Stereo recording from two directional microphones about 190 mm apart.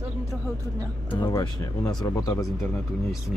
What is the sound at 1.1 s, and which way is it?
Speech, 20° left (ahead or behind).